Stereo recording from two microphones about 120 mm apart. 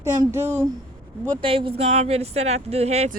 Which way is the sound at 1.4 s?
50° right (ahead or behind).